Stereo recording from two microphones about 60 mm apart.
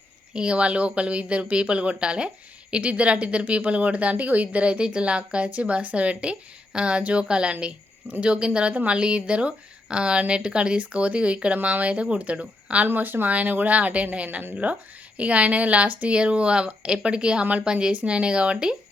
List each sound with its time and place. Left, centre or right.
0.3 s a woman's voice: centre
12.9 s speech: right; by 18.8 s centre